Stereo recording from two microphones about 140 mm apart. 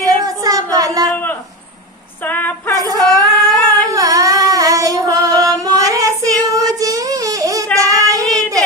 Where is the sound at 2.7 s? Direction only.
25° right (ahead or behind).